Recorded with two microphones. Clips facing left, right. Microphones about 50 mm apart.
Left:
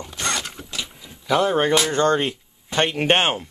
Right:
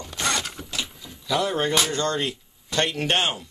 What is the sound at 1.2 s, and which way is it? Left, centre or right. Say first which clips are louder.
Speech: left 5 dB; left.